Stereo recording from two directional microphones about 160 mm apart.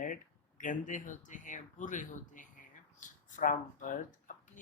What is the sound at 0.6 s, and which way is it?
Speech, 55° left (ahead or behind).